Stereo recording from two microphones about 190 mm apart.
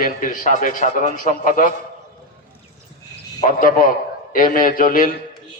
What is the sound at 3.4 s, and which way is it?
A man's voice, 45° left (ahead or behind).